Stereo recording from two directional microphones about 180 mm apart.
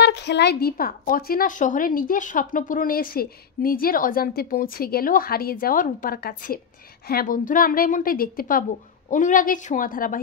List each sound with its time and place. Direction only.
0.0 s a woman's voice: 70° left (ahead or behind); by 10.2 s 50° left (ahead or behind)